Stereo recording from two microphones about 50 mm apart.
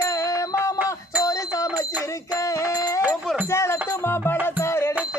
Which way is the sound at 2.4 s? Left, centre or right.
Left.